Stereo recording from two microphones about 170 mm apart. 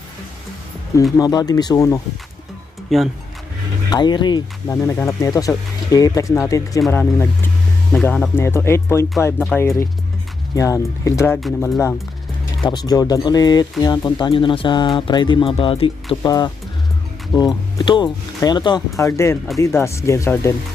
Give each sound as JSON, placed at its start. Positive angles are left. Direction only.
{"t": 1.2, "sound": "speech", "side_deg": 20}
{"t": 2.9, "sound": "speech", "side_deg": 0}
{"t": 3.8, "sound": "speech", "side_deg": 25}
{"t": 16.2, "sound": "speech", "side_deg": 20}